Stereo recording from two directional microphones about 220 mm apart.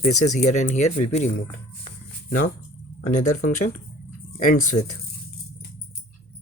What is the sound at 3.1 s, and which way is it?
Speech, 35° left (ahead or behind).